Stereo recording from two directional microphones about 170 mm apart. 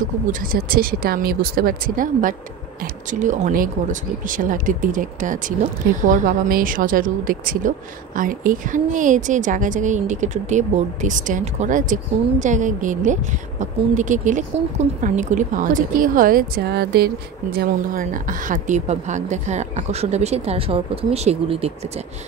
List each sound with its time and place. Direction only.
0.0 s a woman's voice: 55° right (ahead or behind); by 21.7 s 35° right (ahead or behind)